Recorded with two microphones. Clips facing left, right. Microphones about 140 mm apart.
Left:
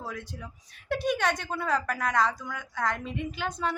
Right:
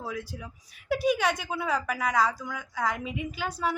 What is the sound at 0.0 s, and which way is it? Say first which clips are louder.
Speech: right 2 dB; 5° right (ahead or behind).